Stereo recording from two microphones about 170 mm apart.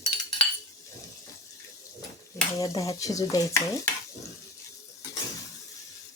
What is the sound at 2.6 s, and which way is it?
Speech, 20° left (ahead or behind).